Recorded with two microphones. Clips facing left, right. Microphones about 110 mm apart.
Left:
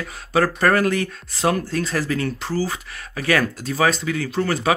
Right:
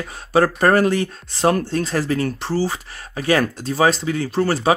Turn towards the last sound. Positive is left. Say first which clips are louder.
# right 3 dB
turn(degrees=-30)  # may be behind; listen again after turning